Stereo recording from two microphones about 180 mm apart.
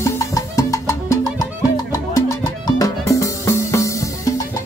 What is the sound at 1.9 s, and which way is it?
Music, 20° left (ahead or behind).